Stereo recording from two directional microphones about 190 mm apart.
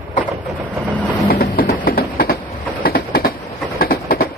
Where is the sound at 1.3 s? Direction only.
50° left (ahead or behind).